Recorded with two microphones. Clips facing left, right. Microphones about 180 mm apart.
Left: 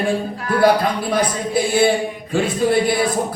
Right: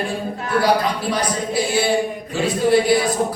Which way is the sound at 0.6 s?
55° left (ahead or behind).